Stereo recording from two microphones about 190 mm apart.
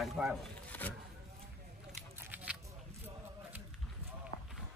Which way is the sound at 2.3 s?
5° right (ahead or behind).